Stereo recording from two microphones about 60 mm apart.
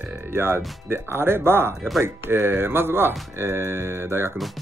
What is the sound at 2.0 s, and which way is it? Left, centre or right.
Speech, right.